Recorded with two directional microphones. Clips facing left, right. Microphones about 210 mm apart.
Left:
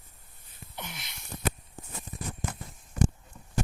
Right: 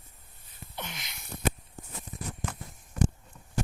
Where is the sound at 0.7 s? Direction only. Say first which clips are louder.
Right 1 dB; 10° left (ahead or behind).